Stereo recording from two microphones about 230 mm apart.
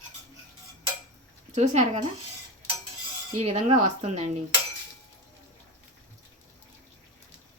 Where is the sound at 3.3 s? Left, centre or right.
Right.